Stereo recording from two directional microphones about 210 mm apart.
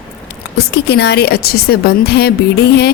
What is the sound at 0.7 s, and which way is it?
A woman's voice, 55° left (ahead or behind).